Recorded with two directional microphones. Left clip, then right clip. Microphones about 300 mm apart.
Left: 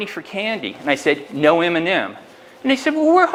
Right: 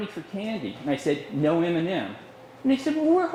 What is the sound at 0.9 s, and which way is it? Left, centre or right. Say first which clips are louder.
Speech: left 8 dB; centre.